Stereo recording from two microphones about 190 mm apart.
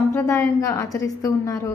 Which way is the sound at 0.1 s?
15° left (ahead or behind).